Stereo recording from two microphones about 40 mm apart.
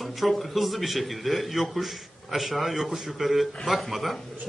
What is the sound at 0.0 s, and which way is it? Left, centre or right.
Speech, centre.